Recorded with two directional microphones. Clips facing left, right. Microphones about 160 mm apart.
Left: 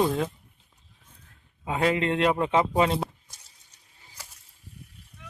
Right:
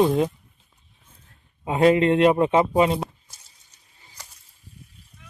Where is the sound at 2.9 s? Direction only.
Centre (ahead or behind).